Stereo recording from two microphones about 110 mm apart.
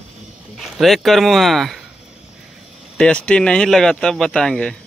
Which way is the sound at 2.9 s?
10° left (ahead or behind).